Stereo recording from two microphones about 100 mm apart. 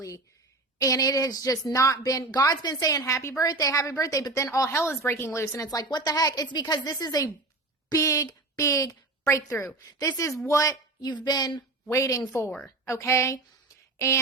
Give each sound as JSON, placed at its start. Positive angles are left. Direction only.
{"t": 0.8, "sound": "a woman's voice", "side_deg": 35}
{"t": 11.9, "sound": "a woman's voice", "side_deg": 30}